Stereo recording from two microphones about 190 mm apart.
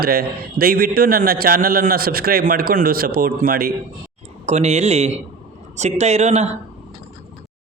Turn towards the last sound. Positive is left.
turn(degrees=-35)  # may be behind; listen again after turning